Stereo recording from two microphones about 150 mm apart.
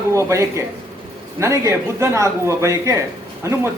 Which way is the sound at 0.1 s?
20° right (ahead or behind).